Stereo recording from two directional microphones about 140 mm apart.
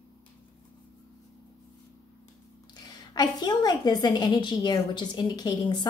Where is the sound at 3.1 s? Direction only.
30° left (ahead or behind).